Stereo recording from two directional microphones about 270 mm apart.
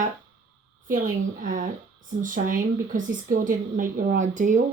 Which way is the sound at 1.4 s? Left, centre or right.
Right.